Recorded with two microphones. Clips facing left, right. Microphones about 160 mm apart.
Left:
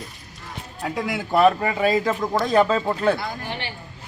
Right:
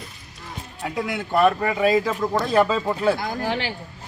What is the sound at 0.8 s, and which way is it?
A man's voice, 5° right (ahead or behind).